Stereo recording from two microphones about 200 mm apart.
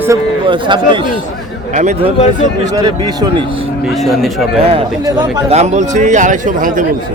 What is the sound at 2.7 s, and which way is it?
Speech, 20° right (ahead or behind).